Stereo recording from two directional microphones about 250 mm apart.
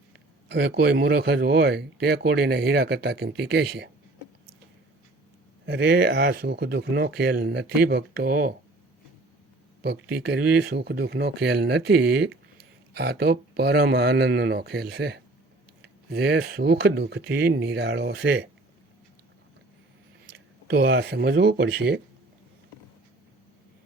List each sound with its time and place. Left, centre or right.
0.4 s speech: right
5.6 s speech: right
9.8 s speech: right
20.2 s speech: right